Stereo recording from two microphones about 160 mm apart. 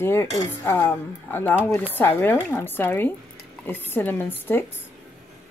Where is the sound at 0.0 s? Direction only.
15° left (ahead or behind).